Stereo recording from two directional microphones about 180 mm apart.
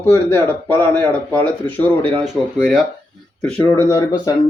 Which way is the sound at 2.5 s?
Centre (ahead or behind).